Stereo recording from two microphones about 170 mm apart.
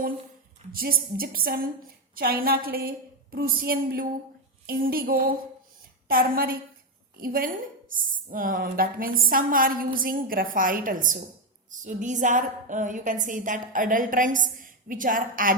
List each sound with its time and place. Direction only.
0.7 s a woman's voice: 60° right (ahead or behind)